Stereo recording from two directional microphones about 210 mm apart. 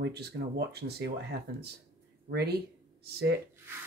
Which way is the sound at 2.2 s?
50° right (ahead or behind).